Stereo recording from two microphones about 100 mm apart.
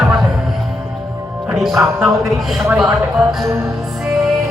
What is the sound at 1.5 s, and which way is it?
Music, 5° right (ahead or behind).